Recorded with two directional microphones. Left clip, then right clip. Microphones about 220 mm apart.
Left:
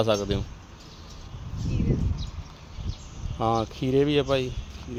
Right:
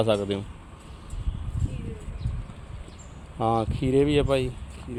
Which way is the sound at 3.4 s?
5° right (ahead or behind).